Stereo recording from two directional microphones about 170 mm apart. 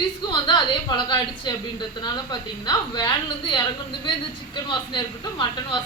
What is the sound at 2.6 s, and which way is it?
Speech, 25° left (ahead or behind).